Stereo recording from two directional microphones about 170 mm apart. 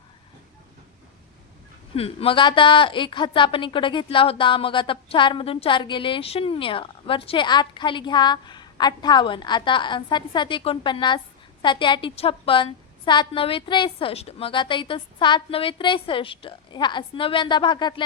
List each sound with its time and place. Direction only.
2.0 s a woman's voice: 35° left (ahead or behind)